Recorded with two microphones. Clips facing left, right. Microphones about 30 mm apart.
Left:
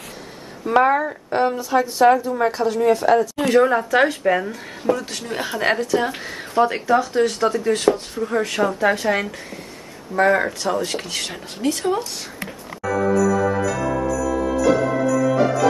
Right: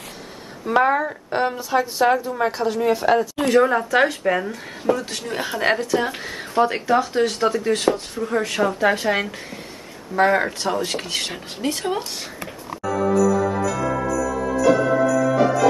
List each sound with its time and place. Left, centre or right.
0.7 s speech: centre
3.4 s speech: centre; by 10.7 s right
10.7 s speech: centre
12.8 s jingle bell: centre